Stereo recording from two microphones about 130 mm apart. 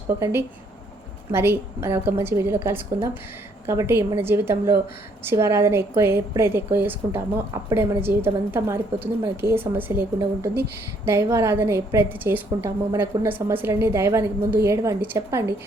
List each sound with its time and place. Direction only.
0.1 s a woman's voice: 20° right (ahead or behind)